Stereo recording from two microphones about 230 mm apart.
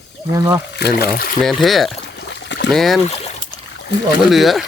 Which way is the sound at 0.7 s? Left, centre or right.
Left.